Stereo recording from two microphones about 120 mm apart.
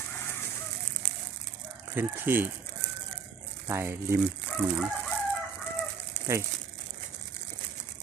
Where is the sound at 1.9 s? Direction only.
20° right (ahead or behind).